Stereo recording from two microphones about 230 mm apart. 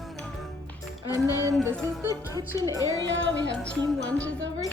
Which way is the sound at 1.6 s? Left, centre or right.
Centre.